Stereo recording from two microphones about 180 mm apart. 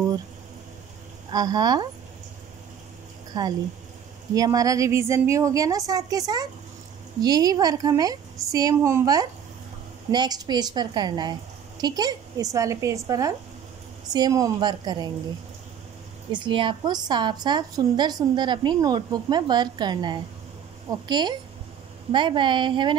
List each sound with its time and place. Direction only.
1.3 s a woman's voice: 20° right (ahead or behind)
4.4 s a woman's voice: 20° right (ahead or behind)
16.3 s a woman's voice: 25° right (ahead or behind)